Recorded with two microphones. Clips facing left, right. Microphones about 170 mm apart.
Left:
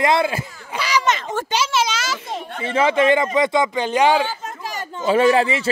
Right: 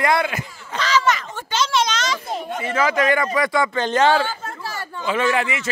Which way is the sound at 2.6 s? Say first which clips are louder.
Left 4 dB; 30° left (ahead or behind).